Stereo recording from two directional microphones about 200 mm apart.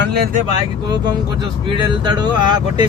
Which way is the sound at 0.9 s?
20° right (ahead or behind).